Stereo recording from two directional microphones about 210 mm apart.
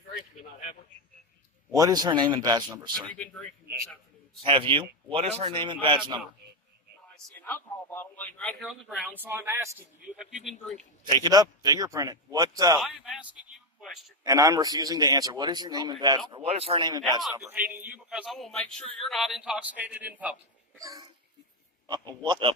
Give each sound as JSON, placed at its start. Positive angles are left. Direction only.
{"t": 1.7, "sound": "a man's voice", "side_deg": -20}
{"t": 4.4, "sound": "a man's voice", "side_deg": -25}
{"t": 7.3, "sound": "a man's voice", "side_deg": 10}
{"t": 12.8, "sound": "a man's voice", "side_deg": 0}
{"t": 14.3, "sound": "a man's voice", "side_deg": -15}
{"t": 17.4, "sound": "a man's voice", "side_deg": -5}